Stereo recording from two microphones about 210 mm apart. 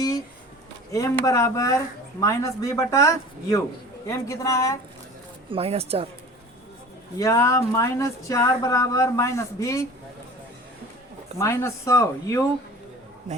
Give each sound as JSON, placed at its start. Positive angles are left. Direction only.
{"t": 0.9, "sound": "speech", "side_deg": 15}
{"t": 5.5, "sound": "speech", "side_deg": -25}
{"t": 7.2, "sound": "speech", "side_deg": 15}
{"t": 11.3, "sound": "speech", "side_deg": 15}